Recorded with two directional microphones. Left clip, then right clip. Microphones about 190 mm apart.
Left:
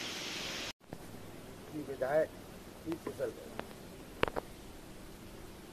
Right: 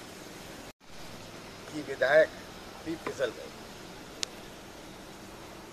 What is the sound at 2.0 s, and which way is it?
Speech, 15° right (ahead or behind).